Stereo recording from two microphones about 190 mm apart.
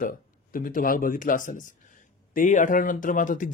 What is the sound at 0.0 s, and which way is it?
Speech, 45° left (ahead or behind).